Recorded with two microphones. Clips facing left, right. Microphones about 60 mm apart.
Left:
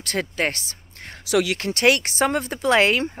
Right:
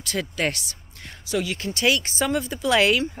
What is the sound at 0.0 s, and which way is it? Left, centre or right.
Speech, left.